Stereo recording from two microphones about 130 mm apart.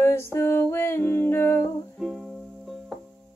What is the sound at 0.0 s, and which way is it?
Music, 20° left (ahead or behind).